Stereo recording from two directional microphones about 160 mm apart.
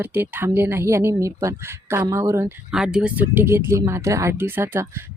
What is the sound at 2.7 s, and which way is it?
Speech, 5° right (ahead or behind).